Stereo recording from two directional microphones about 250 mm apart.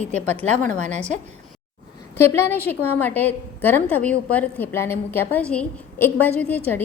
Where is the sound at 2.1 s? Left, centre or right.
Centre.